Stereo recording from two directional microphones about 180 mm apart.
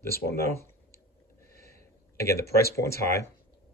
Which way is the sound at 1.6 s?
15° left (ahead or behind).